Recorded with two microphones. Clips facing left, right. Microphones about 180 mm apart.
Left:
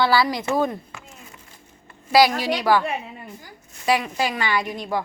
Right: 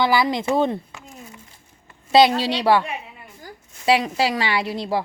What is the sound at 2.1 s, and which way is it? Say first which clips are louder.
Speech: right 2 dB; 25° right (ahead or behind).